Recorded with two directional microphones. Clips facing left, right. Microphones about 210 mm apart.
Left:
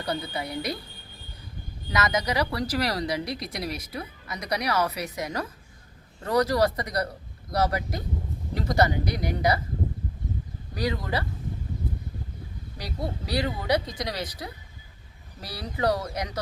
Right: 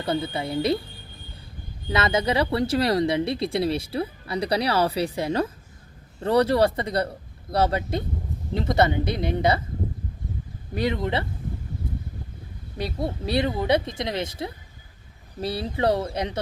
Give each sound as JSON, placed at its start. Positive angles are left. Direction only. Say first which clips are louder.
{"t": 0.0, "sound": "speech", "louder": "right 4 dB", "side_deg": -25}
{"t": 1.9, "sound": "speech", "louder": "right 4 dB", "side_deg": -30}
{"t": 10.8, "sound": "speech", "louder": "right 4 dB", "side_deg": -25}
{"t": 12.7, "sound": "speech", "louder": "right 5 dB", "side_deg": -25}